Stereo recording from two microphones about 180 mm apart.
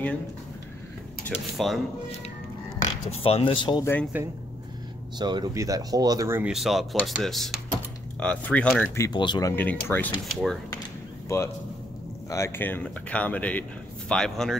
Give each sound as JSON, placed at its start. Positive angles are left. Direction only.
{"t": 1.3, "sound": "speech", "side_deg": 0}
{"t": 2.8, "sound": "speech", "side_deg": 35}
{"t": 4.1, "sound": "speech", "side_deg": -10}
{"t": 5.2, "sound": "speech", "side_deg": -25}
{"t": 11.2, "sound": "a man's voice", "side_deg": 15}